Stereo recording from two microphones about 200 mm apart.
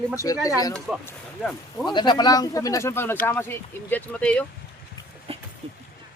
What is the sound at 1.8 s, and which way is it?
Speech, 20° left (ahead or behind).